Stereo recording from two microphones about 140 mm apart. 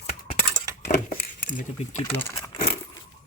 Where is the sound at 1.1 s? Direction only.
70° left (ahead or behind).